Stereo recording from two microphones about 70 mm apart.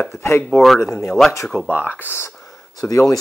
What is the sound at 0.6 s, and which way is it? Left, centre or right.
Speech, centre.